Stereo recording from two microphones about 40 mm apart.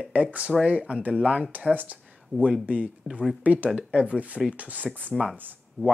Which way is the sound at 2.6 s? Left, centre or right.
Right.